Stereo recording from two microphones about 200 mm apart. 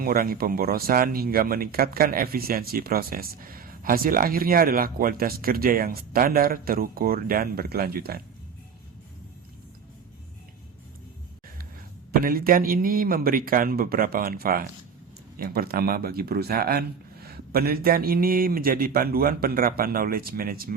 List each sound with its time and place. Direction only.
0.0 s speech: 45° right (ahead or behind)
12.2 s speech: 45° right (ahead or behind)